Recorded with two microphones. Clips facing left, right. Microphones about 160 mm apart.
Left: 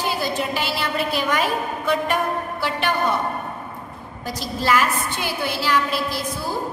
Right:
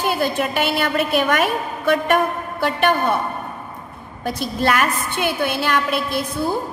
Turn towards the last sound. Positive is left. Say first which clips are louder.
# right 3 dB
turn(degrees=-55)  # may be behind; listen again after turning